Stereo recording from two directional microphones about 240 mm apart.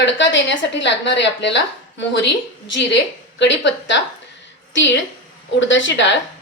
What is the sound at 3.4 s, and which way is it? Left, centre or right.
A woman's voice, left.